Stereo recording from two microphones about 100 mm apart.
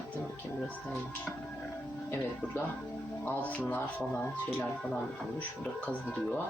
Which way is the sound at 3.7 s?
20° left (ahead or behind).